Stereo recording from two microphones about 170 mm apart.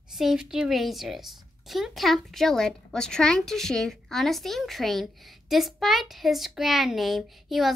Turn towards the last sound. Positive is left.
turn(degrees=0)  # may be behind; listen again after turning